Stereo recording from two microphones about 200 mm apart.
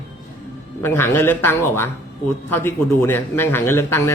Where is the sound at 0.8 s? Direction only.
10° left (ahead or behind).